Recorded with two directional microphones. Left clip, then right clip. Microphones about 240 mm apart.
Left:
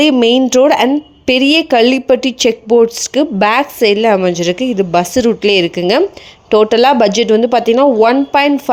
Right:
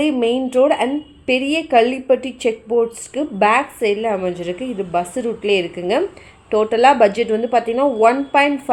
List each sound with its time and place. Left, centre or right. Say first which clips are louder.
0.0 s a woman's voice: left 8 dB; left